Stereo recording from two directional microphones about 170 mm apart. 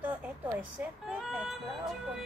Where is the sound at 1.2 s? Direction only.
Centre (ahead or behind).